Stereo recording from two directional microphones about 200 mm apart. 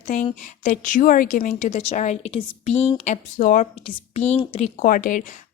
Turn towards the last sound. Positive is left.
turn(degrees=40)  # may be behind; listen again after turning